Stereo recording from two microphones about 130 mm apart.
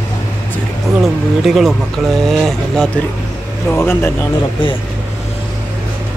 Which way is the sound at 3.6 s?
20° left (ahead or behind).